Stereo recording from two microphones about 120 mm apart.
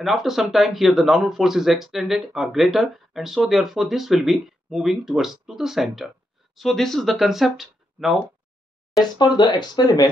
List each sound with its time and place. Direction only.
0.0 s speech: 5° right (ahead or behind)
9.0 s speech: 40° left (ahead or behind)